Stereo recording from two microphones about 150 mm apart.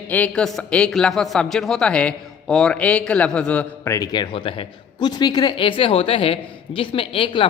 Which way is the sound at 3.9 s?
25° left (ahead or behind).